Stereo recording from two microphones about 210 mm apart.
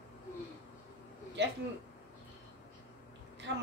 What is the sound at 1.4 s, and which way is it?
Speech, 55° right (ahead or behind).